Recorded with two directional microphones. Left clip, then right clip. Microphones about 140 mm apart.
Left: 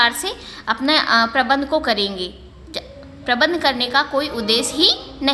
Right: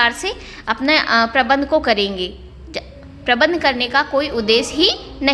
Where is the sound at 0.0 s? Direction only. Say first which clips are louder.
Right 1 dB; 25° right (ahead or behind).